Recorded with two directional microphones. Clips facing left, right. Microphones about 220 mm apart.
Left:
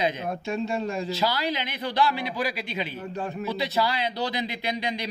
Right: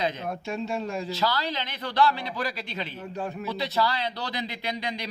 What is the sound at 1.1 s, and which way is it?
A man's voice, 15° left (ahead or behind).